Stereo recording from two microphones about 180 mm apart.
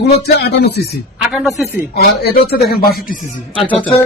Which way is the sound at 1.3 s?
Centre (ahead or behind).